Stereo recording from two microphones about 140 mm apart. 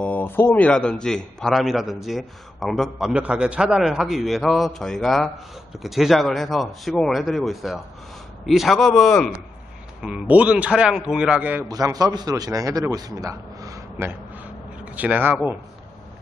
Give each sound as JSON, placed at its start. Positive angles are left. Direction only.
{"t": 0.0, "sound": "a man's voice", "side_deg": 10}
{"t": 10.0, "sound": "a man's voice", "side_deg": -10}
{"t": 11.6, "sound": "a man's voice", "side_deg": -25}